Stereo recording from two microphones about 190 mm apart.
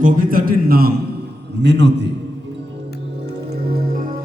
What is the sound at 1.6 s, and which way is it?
Speech, 65° right (ahead or behind).